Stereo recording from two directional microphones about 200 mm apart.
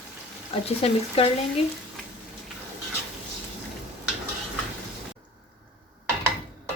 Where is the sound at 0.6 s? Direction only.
30° left (ahead or behind).